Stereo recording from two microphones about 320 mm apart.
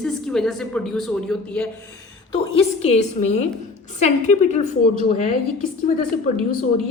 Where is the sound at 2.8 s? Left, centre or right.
Centre.